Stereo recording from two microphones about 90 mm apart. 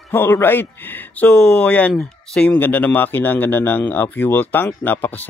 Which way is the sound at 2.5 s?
20° left (ahead or behind).